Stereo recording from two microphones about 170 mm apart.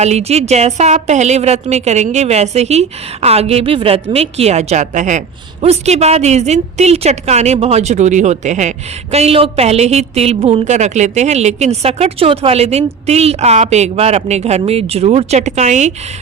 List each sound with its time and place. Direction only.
0.0 s a woman's voice: 40° right (ahead or behind)